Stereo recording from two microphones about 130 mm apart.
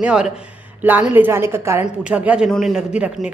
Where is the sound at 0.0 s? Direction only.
5° right (ahead or behind).